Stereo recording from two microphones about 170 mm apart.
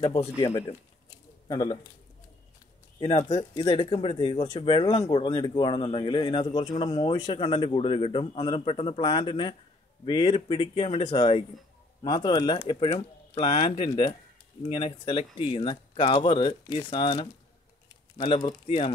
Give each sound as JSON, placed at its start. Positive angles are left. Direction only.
{"t": 0.0, "sound": "speech", "side_deg": 35}
{"t": 3.3, "sound": "speech", "side_deg": 25}
{"t": 12.5, "sound": "speech", "side_deg": 35}